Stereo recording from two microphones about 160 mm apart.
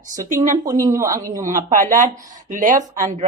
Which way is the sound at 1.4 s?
55° right (ahead or behind).